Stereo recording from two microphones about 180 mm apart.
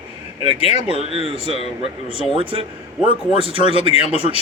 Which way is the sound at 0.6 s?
35° left (ahead or behind).